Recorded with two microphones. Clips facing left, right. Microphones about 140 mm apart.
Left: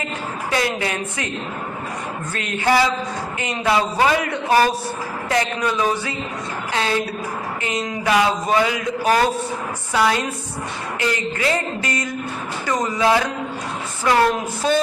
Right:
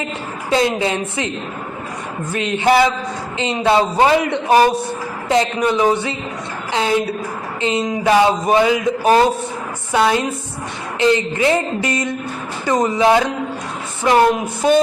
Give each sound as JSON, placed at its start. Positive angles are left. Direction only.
{"t": 0.5, "sound": "a man's voice", "side_deg": -25}
{"t": 2.3, "sound": "a man's voice", "side_deg": -20}